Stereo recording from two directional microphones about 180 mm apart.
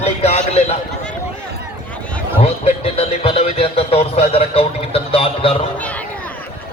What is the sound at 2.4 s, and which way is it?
Speech, 35° left (ahead or behind).